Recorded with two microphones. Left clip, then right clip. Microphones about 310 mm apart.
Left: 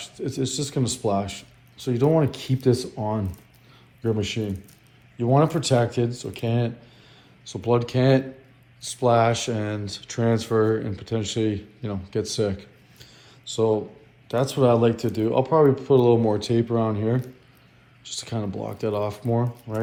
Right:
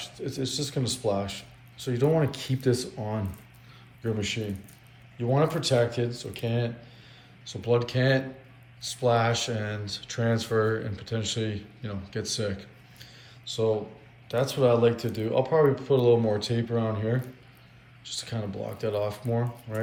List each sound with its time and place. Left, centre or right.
0.0 s speech: centre
4.0 s speech: centre